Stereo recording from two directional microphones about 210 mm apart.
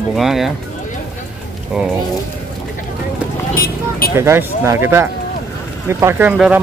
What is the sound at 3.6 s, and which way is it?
Vehicle, 45° left (ahead or behind).